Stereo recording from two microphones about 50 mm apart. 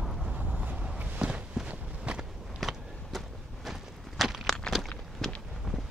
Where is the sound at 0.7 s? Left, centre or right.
Right.